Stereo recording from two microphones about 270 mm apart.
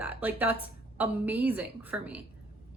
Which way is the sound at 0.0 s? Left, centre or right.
Centre.